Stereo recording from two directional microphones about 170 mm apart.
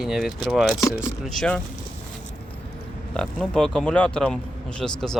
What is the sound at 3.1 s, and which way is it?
Speech, 5° left (ahead or behind).